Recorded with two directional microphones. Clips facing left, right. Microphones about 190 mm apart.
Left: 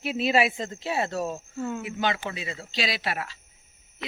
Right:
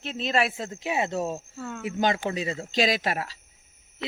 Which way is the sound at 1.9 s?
40° right (ahead or behind).